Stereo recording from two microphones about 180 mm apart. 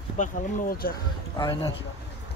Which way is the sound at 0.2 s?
55° left (ahead or behind).